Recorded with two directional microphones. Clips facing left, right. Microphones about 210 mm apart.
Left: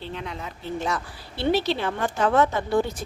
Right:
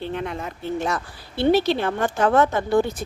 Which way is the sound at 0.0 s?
55° right (ahead or behind).